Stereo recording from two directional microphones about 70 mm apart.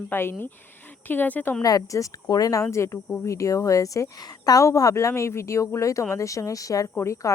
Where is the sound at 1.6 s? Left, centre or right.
Left.